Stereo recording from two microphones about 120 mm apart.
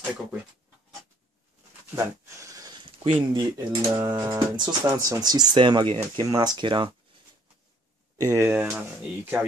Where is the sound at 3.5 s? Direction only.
25° right (ahead or behind); by 6.9 s 45° right (ahead or behind).